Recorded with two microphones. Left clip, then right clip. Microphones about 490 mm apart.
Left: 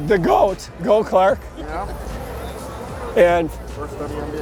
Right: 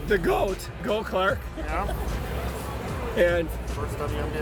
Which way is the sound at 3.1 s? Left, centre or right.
Left.